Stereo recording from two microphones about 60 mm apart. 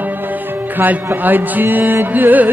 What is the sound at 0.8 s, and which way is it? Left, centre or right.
Speech, right.